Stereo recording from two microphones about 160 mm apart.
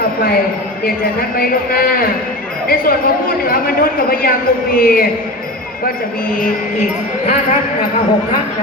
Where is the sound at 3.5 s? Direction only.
65° left (ahead or behind).